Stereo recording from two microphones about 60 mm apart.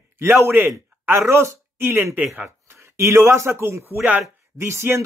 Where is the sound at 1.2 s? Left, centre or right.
Right.